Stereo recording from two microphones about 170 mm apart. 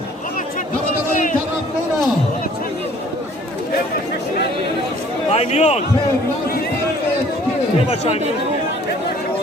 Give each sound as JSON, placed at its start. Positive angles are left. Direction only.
{"t": 1.1, "sound": "a sound", "side_deg": 50}
{"t": 5.3, "sound": "a man's voice", "side_deg": 40}
{"t": 7.9, "sound": "a man's voice", "side_deg": 35}